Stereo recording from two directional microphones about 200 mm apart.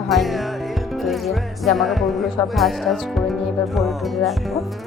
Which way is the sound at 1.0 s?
Centre (ahead or behind).